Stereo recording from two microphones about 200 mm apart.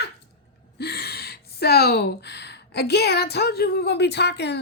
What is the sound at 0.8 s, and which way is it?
Speech, 55° left (ahead or behind).